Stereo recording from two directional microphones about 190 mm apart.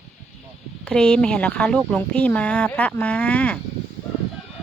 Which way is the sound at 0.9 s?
5° left (ahead or behind).